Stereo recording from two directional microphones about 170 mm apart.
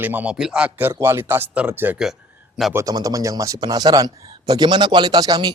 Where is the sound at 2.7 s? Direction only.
20° right (ahead or behind).